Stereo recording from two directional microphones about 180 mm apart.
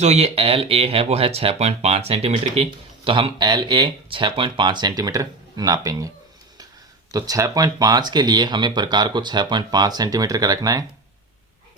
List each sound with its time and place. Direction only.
0.0 s speech: 35° right (ahead or behind); by 6.1 s 20° right (ahead or behind)
7.1 s speech: 20° right (ahead or behind)